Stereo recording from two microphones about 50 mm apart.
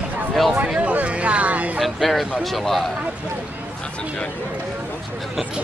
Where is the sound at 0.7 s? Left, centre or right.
Right.